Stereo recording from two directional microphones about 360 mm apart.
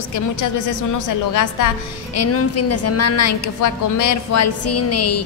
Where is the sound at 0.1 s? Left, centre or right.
Left.